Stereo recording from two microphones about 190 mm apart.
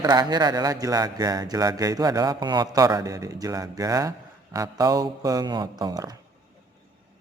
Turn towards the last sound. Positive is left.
turn(degrees=-20)  # may be behind; listen again after turning